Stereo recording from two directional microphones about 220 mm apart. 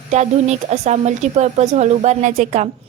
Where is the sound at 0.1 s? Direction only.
30° right (ahead or behind).